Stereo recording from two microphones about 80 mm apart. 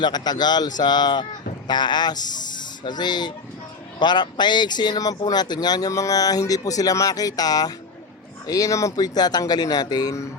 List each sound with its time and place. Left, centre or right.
0.0 s speech: left